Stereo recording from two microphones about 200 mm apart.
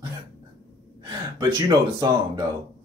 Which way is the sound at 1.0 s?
20° right (ahead or behind).